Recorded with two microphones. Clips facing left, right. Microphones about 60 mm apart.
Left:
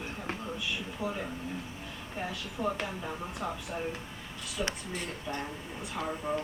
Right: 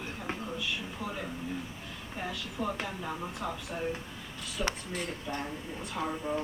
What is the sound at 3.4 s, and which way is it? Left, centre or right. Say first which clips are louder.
Speech: left 1 dB; centre.